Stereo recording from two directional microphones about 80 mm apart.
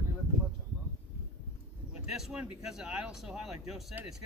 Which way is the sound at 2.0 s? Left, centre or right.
Centre.